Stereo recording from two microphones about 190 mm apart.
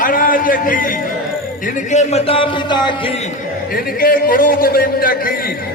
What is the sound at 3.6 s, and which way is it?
A man's voice, 50° left (ahead or behind).